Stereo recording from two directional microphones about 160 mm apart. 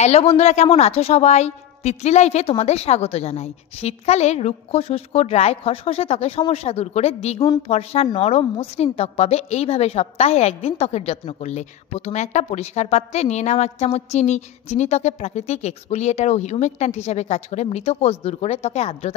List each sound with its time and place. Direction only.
0.0 s a woman's voice: 40° left (ahead or behind)